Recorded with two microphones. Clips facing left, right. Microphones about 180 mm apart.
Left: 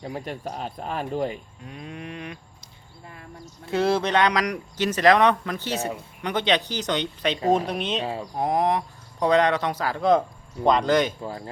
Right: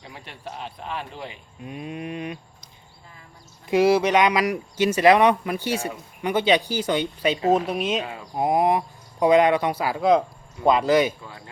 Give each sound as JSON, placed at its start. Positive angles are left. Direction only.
{"t": 0.0, "sound": "speech", "side_deg": 40}
{"t": 1.6, "sound": "speech", "side_deg": -15}
{"t": 3.7, "sound": "speech", "side_deg": -10}
{"t": 7.9, "sound": "speech", "side_deg": 30}
{"t": 8.4, "sound": "speech", "side_deg": -10}
{"t": 11.2, "sound": "speech", "side_deg": 35}